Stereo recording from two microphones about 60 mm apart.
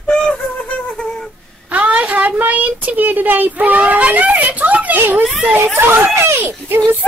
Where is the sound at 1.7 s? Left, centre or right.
Right.